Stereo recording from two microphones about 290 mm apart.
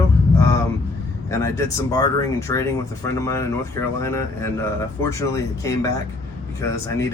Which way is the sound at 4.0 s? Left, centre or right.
Centre.